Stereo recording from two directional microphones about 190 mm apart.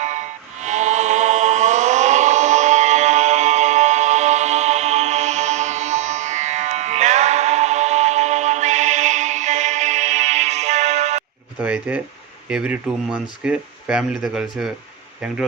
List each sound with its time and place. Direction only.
0.0 s music: 40° right (ahead or behind)
11.6 s a sound: 5° right (ahead or behind)
12.5 s speech: 5° right (ahead or behind)